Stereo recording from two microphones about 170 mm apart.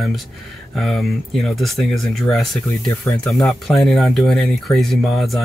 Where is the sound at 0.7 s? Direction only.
Centre (ahead or behind).